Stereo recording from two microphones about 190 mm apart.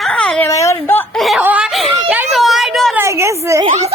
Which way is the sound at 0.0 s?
5° left (ahead or behind).